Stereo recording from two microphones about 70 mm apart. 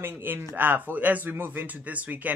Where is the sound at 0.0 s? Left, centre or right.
Right.